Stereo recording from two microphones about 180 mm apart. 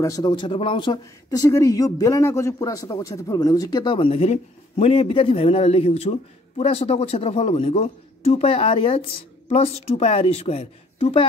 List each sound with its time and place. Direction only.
0.0 s speech: 20° left (ahead or behind)